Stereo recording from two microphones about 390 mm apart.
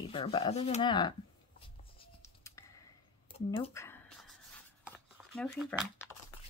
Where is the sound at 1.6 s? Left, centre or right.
Centre.